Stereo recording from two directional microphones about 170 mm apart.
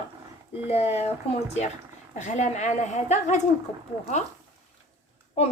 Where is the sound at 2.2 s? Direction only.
45° left (ahead or behind).